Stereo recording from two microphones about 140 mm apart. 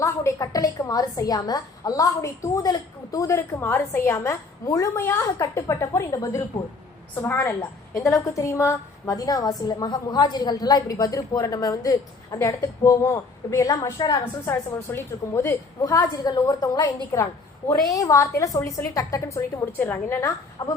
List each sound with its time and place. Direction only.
0.0 s a woman's voice: 20° left (ahead or behind)
7.2 s a woman's voice: 15° left (ahead or behind)
16.0 s a woman's voice: 30° left (ahead or behind)
17.1 s a woman's voice: 15° left (ahead or behind)